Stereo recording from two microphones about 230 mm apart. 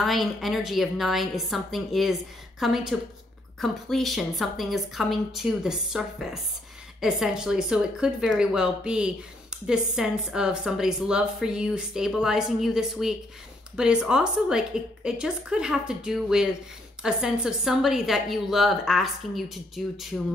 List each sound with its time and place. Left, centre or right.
0.0 s speech: centre